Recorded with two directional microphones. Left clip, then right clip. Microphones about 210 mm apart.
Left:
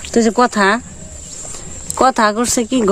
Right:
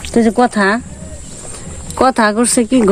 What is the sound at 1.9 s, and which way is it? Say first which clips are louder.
Speech: right 1 dB; 15° left (ahead or behind).